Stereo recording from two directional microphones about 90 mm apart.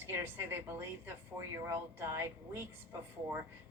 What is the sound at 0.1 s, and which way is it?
Speech, 25° right (ahead or behind).